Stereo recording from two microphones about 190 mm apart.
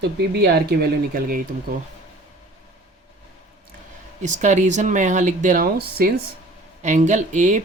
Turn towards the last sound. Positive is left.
turn(degrees=-40)  # may be behind; listen again after turning